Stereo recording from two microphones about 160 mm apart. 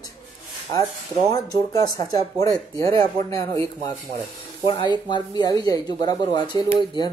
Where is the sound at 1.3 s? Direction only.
25° left (ahead or behind).